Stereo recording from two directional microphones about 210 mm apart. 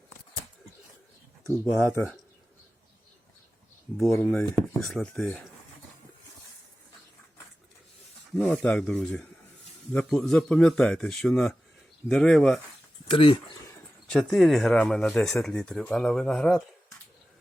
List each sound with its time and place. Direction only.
1.9 s speech: 10° left (ahead or behind)
3.9 s speech: centre (ahead or behind)
8.4 s speech: 5° left (ahead or behind)
13.1 s speech: 25° left (ahead or behind)
14.1 s speech: centre (ahead or behind)